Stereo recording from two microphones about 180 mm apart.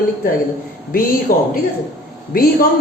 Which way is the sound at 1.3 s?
50° left (ahead or behind).